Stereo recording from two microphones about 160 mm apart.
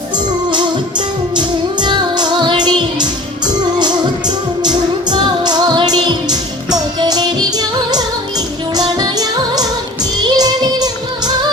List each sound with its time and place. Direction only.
0.5 s music: 30° right (ahead or behind)